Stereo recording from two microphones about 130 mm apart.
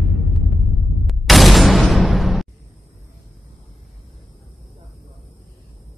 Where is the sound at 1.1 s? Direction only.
Centre (ahead or behind).